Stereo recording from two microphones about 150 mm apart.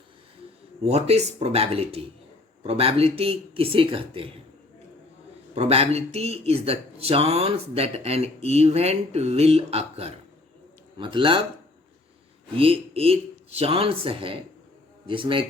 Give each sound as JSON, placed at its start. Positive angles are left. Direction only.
{"t": 0.9, "sound": "speech", "side_deg": -45}
{"t": 5.5, "sound": "speech", "side_deg": -40}
{"t": 12.5, "sound": "speech", "side_deg": -40}